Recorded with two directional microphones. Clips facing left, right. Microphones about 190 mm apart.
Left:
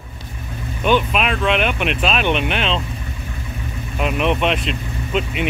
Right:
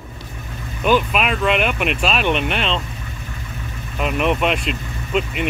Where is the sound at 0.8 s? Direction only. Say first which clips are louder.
Even; centre (ahead or behind).